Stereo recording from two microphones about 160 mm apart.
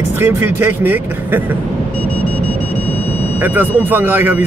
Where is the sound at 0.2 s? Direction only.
15° right (ahead or behind).